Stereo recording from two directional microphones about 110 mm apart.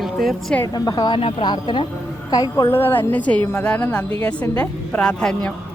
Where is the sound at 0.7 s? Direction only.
40° left (ahead or behind).